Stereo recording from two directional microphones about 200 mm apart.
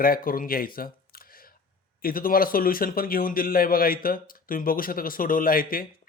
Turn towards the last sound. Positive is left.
turn(degrees=45)  # may be behind; listen again after turning